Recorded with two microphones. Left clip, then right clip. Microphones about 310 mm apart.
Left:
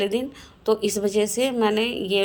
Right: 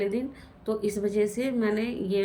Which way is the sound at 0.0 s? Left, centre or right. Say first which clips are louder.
Left 5 dB; left.